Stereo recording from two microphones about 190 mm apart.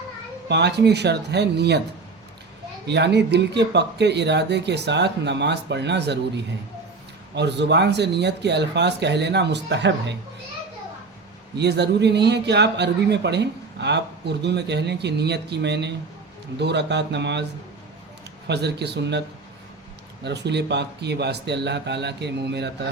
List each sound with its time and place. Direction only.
0.4 s speech: 65° right (ahead or behind)
2.8 s speech: 65° right (ahead or behind)
11.5 s speech: 65° right (ahead or behind)
18.4 s speech: 60° right (ahead or behind)
20.2 s speech: 65° right (ahead or behind)